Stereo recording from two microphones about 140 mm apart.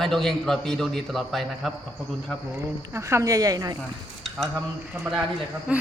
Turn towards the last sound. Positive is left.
turn(degrees=-10)  # may be behind; listen again after turning